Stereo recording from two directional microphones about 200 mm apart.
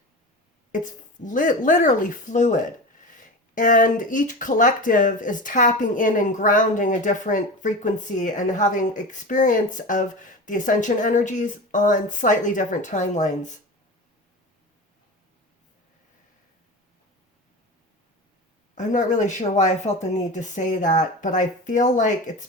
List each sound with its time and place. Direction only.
0.7 s speech: 40° left (ahead or behind)
18.7 s speech: 40° left (ahead or behind)